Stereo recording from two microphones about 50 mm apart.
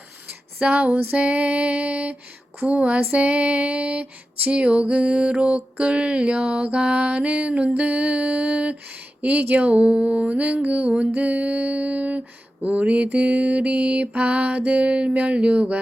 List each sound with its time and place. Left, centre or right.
0.7 s mantra: right
9.8 s mantra: centre